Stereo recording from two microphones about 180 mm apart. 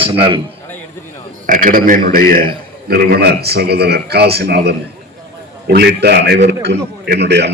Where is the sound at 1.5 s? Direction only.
50° right (ahead or behind).